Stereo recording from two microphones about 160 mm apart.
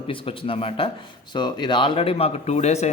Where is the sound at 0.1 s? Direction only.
35° left (ahead or behind).